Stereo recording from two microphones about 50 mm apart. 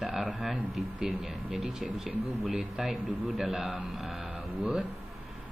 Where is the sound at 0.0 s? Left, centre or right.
Centre.